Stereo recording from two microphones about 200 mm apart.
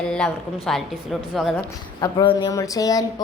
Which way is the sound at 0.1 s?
Centre (ahead or behind).